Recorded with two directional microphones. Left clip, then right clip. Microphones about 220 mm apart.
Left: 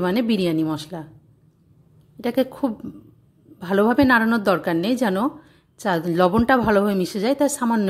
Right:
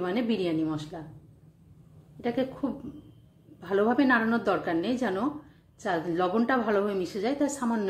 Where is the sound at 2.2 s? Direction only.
50° left (ahead or behind).